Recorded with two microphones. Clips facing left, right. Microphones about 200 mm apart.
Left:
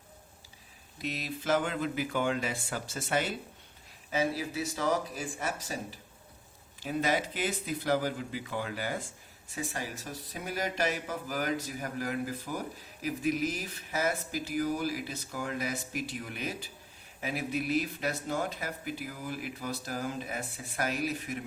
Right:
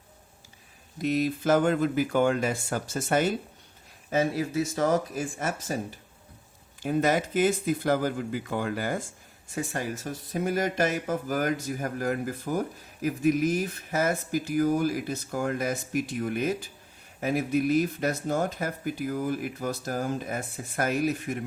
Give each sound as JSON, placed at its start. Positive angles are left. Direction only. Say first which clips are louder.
{"t": 1.0, "sound": "speech", "louder": "right 9 dB", "side_deg": -50}
{"t": 6.8, "sound": "speech", "louder": "right 6 dB", "side_deg": -50}